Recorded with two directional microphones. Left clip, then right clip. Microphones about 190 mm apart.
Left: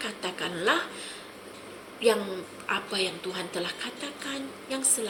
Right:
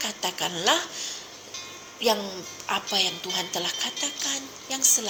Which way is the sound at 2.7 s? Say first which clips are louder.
Right 4 dB; 50° right (ahead or behind).